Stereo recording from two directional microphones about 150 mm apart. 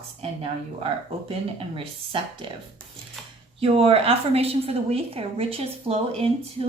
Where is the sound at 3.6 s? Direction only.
40° right (ahead or behind).